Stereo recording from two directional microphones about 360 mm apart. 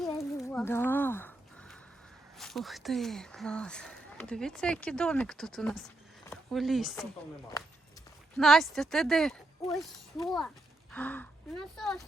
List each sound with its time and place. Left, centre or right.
0.1 s a sound: centre
2.4 s speech: centre
8.4 s speech: centre